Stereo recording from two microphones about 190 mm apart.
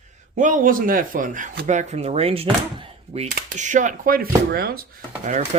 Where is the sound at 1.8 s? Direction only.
35° right (ahead or behind).